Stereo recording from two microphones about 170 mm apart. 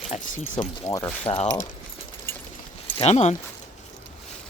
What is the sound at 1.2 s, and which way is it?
Speech, 35° left (ahead or behind).